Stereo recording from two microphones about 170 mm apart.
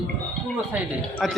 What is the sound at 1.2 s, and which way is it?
Speech, centre (ahead or behind).